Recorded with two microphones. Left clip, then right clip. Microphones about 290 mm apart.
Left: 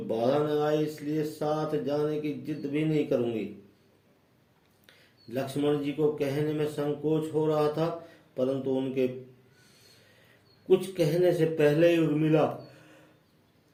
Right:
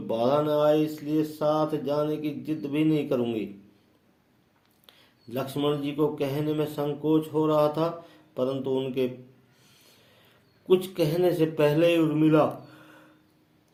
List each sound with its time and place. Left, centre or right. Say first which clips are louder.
0.1 s mantra: right 3 dB; right
5.3 s mantra: right 1 dB; right
10.7 s mantra: right 1 dB; right